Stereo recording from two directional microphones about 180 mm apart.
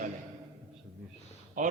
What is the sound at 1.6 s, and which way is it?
Speech, 45° right (ahead or behind).